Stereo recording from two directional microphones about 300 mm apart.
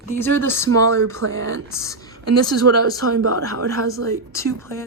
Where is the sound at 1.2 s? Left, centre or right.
Right.